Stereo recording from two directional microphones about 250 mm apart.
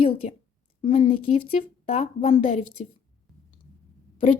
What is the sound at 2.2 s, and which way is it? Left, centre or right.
Speech, left.